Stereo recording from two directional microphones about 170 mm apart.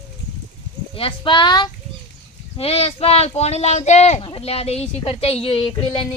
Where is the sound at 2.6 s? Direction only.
35° left (ahead or behind).